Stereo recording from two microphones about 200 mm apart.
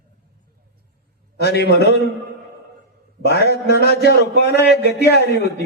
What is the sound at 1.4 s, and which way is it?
Speech, 55° left (ahead or behind).